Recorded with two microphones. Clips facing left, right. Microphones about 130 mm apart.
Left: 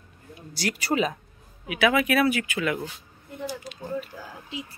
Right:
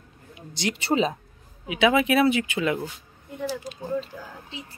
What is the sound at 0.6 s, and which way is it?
Speech, 25° right (ahead or behind).